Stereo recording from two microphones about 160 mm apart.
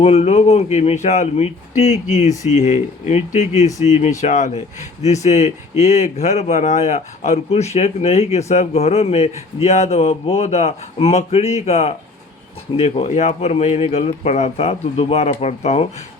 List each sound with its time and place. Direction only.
0.0 s a man's voice: 40° left (ahead or behind)